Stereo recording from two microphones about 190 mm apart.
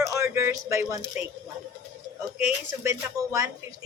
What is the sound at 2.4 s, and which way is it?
A woman's voice, 15° right (ahead or behind).